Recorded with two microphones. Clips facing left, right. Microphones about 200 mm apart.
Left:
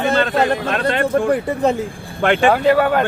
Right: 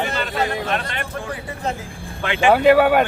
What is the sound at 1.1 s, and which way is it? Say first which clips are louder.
Speech: left 15 dB; 55° left (ahead or behind).